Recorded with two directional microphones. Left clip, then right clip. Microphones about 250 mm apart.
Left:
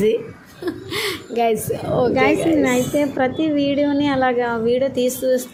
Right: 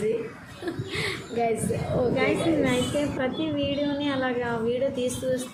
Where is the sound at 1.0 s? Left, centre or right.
Left.